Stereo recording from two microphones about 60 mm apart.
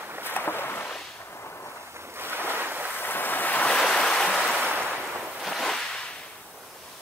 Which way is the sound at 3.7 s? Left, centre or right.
Centre.